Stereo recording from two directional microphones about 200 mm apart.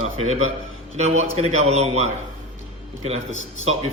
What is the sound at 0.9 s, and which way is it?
A man's voice, 35° right (ahead or behind).